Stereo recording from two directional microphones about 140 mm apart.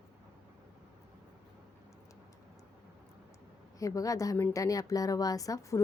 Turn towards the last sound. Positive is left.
turn(degrees=25)  # may be behind; listen again after turning